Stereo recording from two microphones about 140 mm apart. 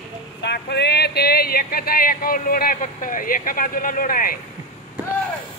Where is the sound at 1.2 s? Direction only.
90° left.